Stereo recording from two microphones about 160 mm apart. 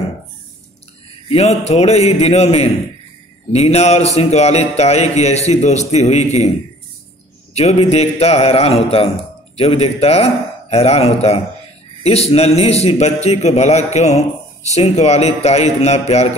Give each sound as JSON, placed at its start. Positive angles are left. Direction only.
{"t": 1.3, "sound": "a man's voice", "side_deg": 40}
{"t": 7.5, "sound": "a man's voice", "side_deg": 40}